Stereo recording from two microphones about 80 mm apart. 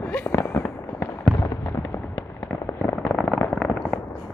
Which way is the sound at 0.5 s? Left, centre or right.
Left.